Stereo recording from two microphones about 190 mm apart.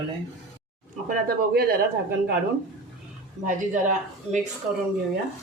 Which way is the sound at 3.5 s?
40° right (ahead or behind).